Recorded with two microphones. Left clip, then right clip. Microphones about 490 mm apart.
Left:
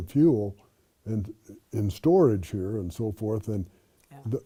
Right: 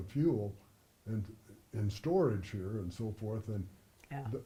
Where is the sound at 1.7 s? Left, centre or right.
Left.